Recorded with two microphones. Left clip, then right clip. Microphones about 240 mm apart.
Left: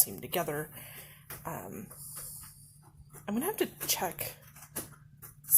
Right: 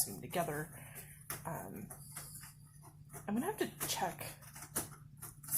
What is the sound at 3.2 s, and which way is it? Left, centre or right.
Speech, left.